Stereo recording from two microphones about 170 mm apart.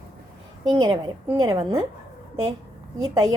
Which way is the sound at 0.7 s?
25° right (ahead or behind).